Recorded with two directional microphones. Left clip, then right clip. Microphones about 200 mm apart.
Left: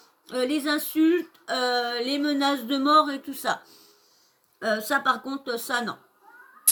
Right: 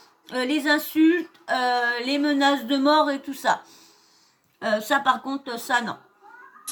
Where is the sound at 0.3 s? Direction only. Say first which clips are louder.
Right 3 dB; centre (ahead or behind).